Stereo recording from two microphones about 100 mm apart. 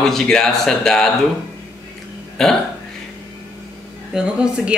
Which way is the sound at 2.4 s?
5° left (ahead or behind).